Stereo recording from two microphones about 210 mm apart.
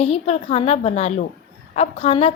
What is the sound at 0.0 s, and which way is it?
A woman's voice, 30° left (ahead or behind).